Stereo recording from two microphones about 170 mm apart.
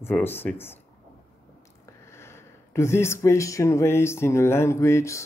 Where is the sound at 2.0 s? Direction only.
15° left (ahead or behind).